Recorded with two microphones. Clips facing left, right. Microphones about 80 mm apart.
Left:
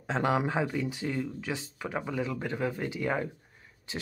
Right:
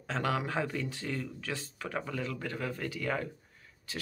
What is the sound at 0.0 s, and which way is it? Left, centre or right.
Speech, left.